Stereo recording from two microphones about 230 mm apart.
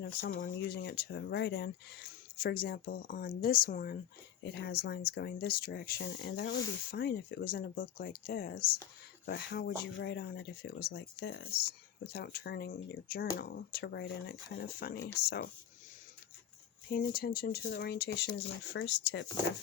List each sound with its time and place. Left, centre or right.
0.0 s speech: left
16.9 s speech: left